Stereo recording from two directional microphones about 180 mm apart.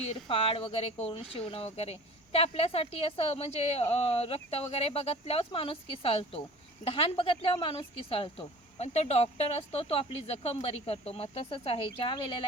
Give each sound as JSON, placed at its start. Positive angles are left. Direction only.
{"t": 0.1, "sound": "speech", "side_deg": 30}